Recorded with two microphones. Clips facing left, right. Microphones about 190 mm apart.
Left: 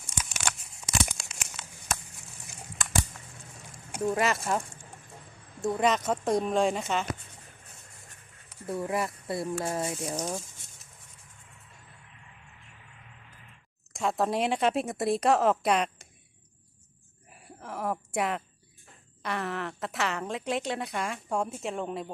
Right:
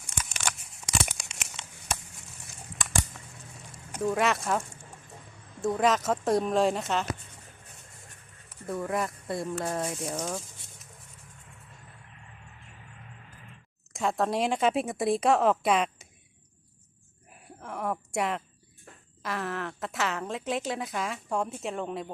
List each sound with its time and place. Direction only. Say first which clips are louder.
0.2 s crumpling: even; 10° left (ahead or behind)
2.7 s a sound: left 2 dB; centre (ahead or behind)
4.1 s a woman's voice: right 1 dB; centre (ahead or behind)
5.6 s a woman's voice: right 1 dB; centre (ahead or behind)
8.9 s a woman's voice: right 1 dB; 5° left (ahead or behind)
10.2 s speech: even; 15° left (ahead or behind)
13.9 s a woman's voice: even; centre (ahead or behind)
17.3 s a sound: even; centre (ahead or behind)
17.9 s a woman's voice: even; centre (ahead or behind)